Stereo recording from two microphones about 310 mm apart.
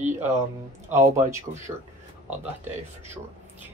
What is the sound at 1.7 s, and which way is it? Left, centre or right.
Speech, centre.